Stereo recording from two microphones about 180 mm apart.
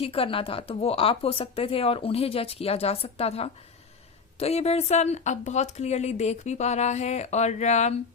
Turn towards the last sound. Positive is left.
turn(degrees=40)  # may be behind; listen again after turning